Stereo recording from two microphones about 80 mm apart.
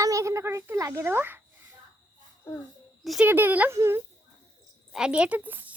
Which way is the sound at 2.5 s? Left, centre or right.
Left.